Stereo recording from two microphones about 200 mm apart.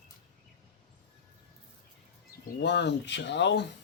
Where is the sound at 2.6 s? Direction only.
60° left (ahead or behind).